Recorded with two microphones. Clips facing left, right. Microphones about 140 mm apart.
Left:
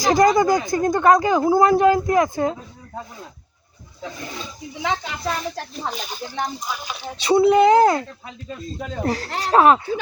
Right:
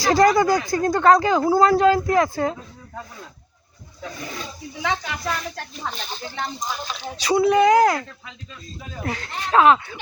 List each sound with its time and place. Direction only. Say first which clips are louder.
0.0 s speech: left 1 dB; 20° left (ahead or behind)
5.9 s speech: left 2 dB; 10° left (ahead or behind)
7.2 s speech: left 3 dB; 25° left (ahead or behind)
9.0 s speech: left 5 dB; 35° left (ahead or behind)